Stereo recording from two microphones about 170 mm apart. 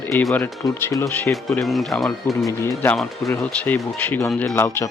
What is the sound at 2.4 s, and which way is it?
Speech, 15° left (ahead or behind).